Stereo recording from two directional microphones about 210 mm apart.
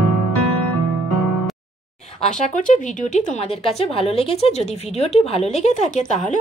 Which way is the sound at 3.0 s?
30° left (ahead or behind).